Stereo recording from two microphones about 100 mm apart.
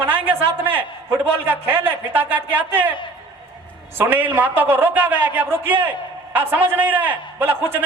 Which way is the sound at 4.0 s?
20° right (ahead or behind).